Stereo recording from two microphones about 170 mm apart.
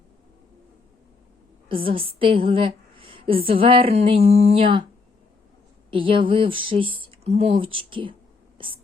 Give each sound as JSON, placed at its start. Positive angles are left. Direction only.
{"t": 1.7, "sound": "a woman's voice", "side_deg": -30}
{"t": 5.9, "sound": "a woman's voice", "side_deg": -30}
{"t": 8.5, "sound": "whispering", "side_deg": -30}